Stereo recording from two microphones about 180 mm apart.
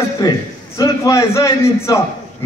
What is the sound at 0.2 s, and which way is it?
A man's voice, 20° left (ahead or behind).